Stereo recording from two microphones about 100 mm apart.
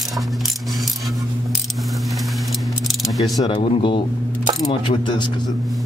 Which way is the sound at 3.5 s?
60° left (ahead or behind).